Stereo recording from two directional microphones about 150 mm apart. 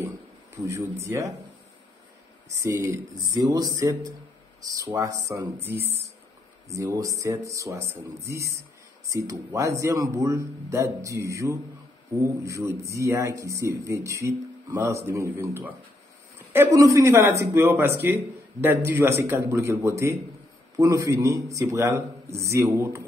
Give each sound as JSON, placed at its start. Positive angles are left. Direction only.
{"t": 0.7, "sound": "speech", "side_deg": -20}
{"t": 2.6, "sound": "a man's voice", "side_deg": -20}